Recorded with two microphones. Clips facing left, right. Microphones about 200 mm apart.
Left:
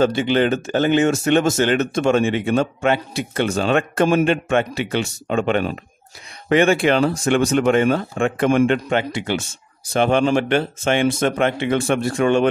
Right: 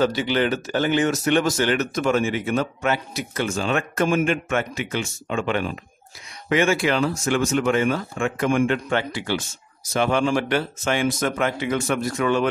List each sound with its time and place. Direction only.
0.0 s speech: 25° left (ahead or behind)
6.5 s speech: 55° left (ahead or behind)
6.9 s speech: 30° left (ahead or behind)